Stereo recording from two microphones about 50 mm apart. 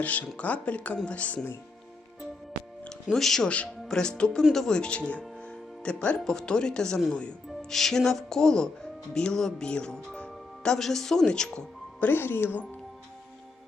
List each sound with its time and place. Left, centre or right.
0.0 s speech: left
3.1 s speech: centre
10.2 s music: centre
10.8 s speech: centre
11.9 s speech: left